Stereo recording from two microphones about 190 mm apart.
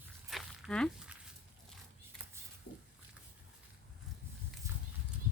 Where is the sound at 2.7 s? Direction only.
65° left (ahead or behind).